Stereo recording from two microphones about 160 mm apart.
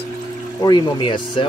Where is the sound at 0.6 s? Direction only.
30° left (ahead or behind).